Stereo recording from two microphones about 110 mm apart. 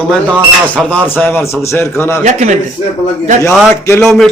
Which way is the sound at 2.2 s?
90° right.